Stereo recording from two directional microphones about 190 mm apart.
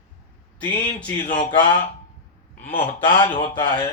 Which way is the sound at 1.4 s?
25° left (ahead or behind).